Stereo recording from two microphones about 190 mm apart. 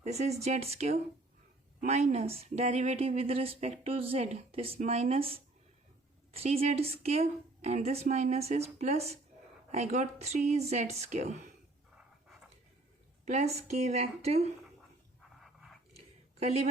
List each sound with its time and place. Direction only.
0.0 s speech: 35° right (ahead or behind)
13.7 s speech: 35° right (ahead or behind)
16.0 s a sound: 35° right (ahead or behind)